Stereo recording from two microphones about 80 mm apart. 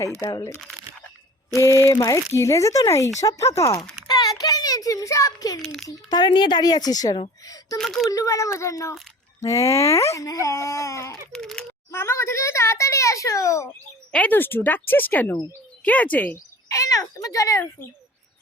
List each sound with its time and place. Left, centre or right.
0.0 s speech: left
4.0 s a sound: left
6.1 s a woman's voice: left
7.8 s speech: centre
8.1 s speech: left
11.3 s speech: centre
11.9 s speech: left
14.1 s speech: centre
16.6 s speech: left